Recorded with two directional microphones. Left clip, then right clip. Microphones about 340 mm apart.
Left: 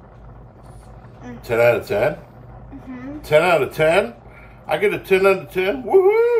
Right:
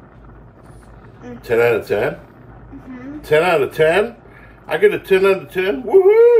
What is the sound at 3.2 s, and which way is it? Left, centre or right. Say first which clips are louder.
Speech: right 1 dB; centre.